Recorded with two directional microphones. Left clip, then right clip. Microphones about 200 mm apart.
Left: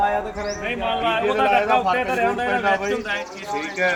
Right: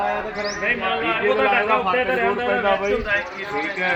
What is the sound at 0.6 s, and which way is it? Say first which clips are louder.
Speech: right 3 dB; 50° left (ahead or behind).